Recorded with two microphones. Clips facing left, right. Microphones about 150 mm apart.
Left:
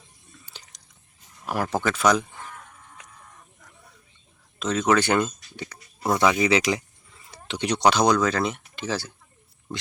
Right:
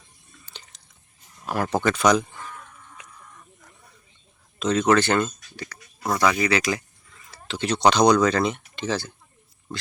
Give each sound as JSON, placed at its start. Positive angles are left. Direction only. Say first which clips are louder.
{"t": 0.4, "sound": "drip", "louder": "right 3 dB", "side_deg": 10}
{"t": 1.7, "sound": "speech", "louder": "right 2 dB", "side_deg": 5}
{"t": 4.6, "sound": "speech", "louder": "right 2 dB", "side_deg": 5}
{"t": 5.6, "sound": "a sound", "louder": "left 2 dB", "side_deg": 25}
{"t": 7.2, "sound": "speech", "louder": "even", "side_deg": 20}